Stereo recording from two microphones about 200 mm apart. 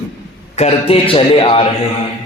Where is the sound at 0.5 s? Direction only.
30° left (ahead or behind).